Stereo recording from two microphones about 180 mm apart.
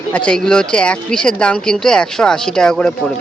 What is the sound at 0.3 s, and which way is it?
Speech, 5° left (ahead or behind).